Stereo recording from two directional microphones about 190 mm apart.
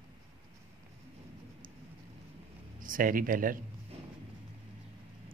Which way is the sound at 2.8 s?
45° right (ahead or behind).